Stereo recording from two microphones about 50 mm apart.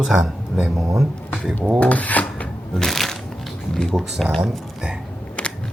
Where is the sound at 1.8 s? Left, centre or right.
Left.